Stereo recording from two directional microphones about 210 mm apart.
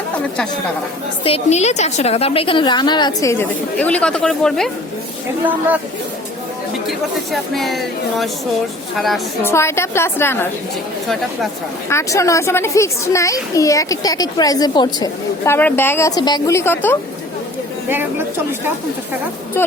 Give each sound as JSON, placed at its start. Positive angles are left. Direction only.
{"t": 1.2, "sound": "a woman's voice", "side_deg": 30}
{"t": 5.5, "sound": "a woman's voice", "side_deg": -5}
{"t": 6.8, "sound": "speech", "side_deg": 0}
{"t": 9.4, "sound": "speech", "side_deg": 10}
{"t": 11.9, "sound": "speech", "side_deg": 15}
{"t": 17.8, "sound": "a woman's voice", "side_deg": -10}
{"t": 19.6, "sound": "speech", "side_deg": 10}